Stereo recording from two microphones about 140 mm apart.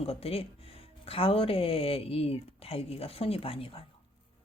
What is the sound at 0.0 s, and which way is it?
Speech, 45° left (ahead or behind).